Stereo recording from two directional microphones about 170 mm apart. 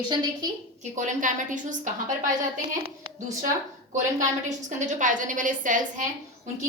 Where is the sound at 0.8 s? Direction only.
45° right (ahead or behind).